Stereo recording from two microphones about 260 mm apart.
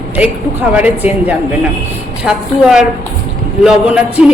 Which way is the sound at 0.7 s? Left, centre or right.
Centre.